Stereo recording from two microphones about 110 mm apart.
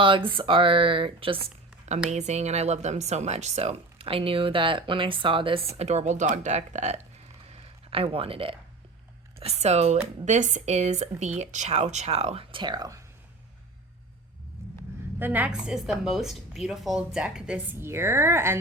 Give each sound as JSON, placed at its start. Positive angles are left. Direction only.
{"t": 0.3, "sound": "speech", "side_deg": -50}
{"t": 2.0, "sound": "speech", "side_deg": -90}
{"t": 5.7, "sound": "speech", "side_deg": -85}
{"t": 7.4, "sound": "a sound", "side_deg": -70}
{"t": 9.4, "sound": "speech", "side_deg": -80}
{"t": 14.6, "sound": "vehicle", "side_deg": -25}
{"t": 15.2, "sound": "a woman's voice", "side_deg": -15}
{"t": 17.7, "sound": "speech", "side_deg": -25}